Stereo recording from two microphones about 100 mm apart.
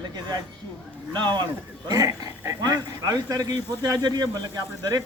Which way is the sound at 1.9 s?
35° right (ahead or behind).